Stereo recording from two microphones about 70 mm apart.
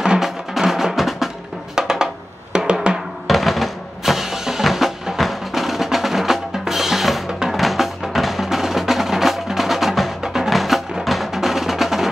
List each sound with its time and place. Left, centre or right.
0.0 s music: centre
2.5 s drum: centre
3.3 s music: centre